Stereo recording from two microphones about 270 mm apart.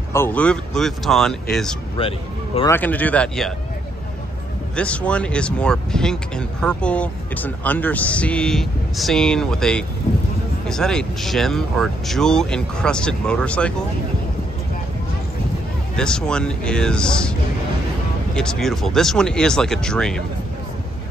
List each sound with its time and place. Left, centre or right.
0.1 s speech: centre
2.0 s speech: centre
2.7 s speech: centre
4.7 s speech: centre
16.0 s speech: centre